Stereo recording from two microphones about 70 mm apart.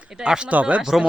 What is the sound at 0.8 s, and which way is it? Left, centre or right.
Speech, centre.